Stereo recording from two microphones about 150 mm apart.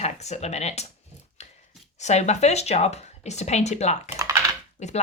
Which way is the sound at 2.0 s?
50° left (ahead or behind).